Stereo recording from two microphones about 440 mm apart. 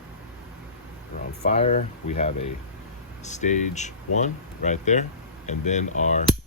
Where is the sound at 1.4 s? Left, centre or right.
Centre.